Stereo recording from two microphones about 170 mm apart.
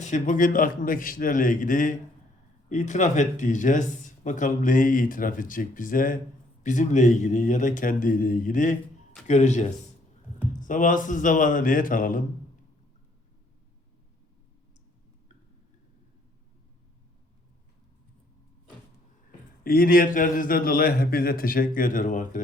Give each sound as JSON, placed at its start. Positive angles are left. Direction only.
{"t": 0.0, "sound": "speech", "side_deg": 45}
{"t": 19.6, "sound": "a man's voice", "side_deg": 60}